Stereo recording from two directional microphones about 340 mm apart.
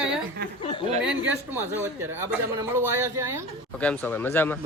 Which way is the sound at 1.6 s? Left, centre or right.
Centre.